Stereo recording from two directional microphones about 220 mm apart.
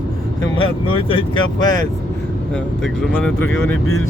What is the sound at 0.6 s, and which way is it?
Speech, 25° left (ahead or behind).